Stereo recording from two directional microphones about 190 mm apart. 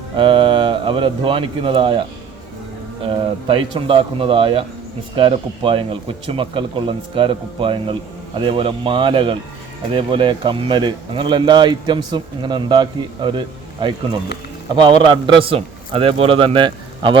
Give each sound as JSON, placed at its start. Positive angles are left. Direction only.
{"t": 0.2, "sound": "speech", "side_deg": -25}
{"t": 3.0, "sound": "speech", "side_deg": -30}